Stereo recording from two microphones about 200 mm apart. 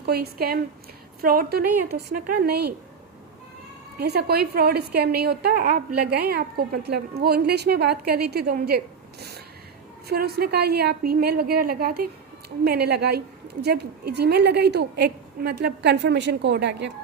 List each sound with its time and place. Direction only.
0.0 s a woman's voice: 50° right (ahead or behind)
4.0 s a woman's voice: 55° right (ahead or behind)
10.1 s a woman's voice: 50° right (ahead or behind)